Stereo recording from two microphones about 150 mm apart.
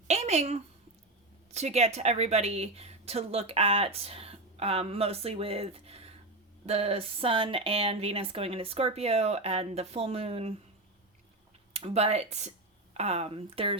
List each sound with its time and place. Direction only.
0.1 s a sound: 45° right (ahead or behind)
1.5 s a woman's voice: 45° right (ahead or behind)
11.7 s speech: 40° right (ahead or behind)